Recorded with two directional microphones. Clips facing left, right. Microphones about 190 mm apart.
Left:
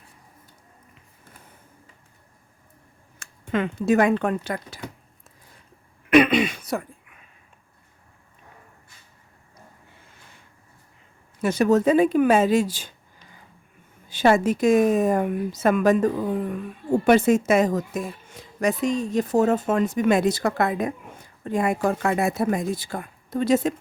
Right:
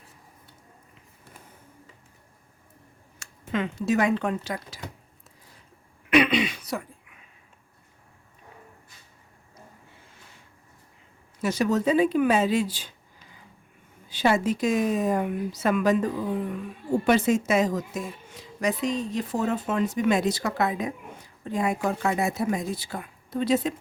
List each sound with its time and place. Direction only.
3.5 s speech: 55° left (ahead or behind)
6.1 s a sound: 50° left (ahead or behind)
11.4 s a woman's voice: 55° left (ahead or behind)
14.1 s a woman's voice: 50° left (ahead or behind)